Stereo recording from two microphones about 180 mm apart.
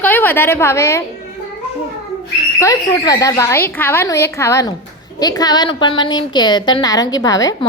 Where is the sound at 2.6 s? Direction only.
20° left (ahead or behind).